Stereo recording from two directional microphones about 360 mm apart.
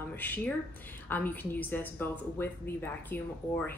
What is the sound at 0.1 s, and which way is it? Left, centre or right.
A woman's voice, centre.